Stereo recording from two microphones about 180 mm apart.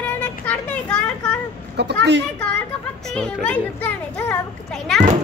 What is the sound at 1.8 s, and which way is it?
Speech, 70° right (ahead or behind).